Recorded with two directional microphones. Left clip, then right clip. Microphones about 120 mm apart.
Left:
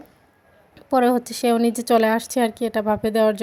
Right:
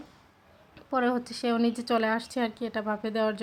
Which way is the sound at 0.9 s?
35° left (ahead or behind).